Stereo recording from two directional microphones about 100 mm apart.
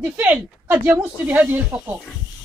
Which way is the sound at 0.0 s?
15° right (ahead or behind).